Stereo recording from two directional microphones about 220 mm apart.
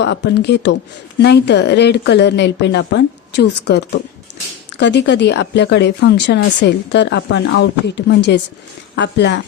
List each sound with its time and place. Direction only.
0.0 s speech: 50° left (ahead or behind)